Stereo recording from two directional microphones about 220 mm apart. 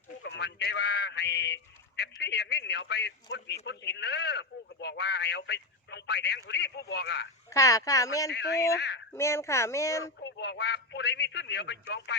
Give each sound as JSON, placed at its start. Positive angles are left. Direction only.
{"t": 0.2, "sound": "speech", "side_deg": 50}
{"t": 7.5, "sound": "speech", "side_deg": 15}
{"t": 8.3, "sound": "speech", "side_deg": 50}
{"t": 9.1, "sound": "speech", "side_deg": 10}
{"t": 10.2, "sound": "speech", "side_deg": 50}